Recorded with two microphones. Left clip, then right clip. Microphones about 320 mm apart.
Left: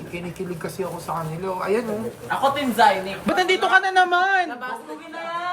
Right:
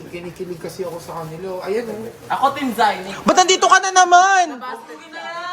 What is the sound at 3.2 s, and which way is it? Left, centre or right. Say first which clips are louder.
A man's voice: right 7 dB; right.